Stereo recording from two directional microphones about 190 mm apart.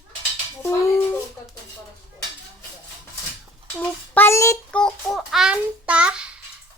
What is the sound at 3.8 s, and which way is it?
Child singing, 10° left (ahead or behind).